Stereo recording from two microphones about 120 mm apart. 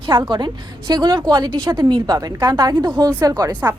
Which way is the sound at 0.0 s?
40° right (ahead or behind).